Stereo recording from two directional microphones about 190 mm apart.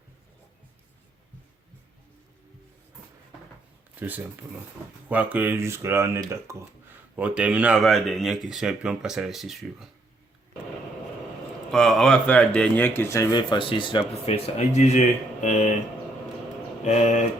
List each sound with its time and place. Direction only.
4.0 s speech: 10° right (ahead or behind)
11.7 s speech: centre (ahead or behind); by 15.7 s 40° left (ahead or behind)
16.8 s speech: 35° left (ahead or behind)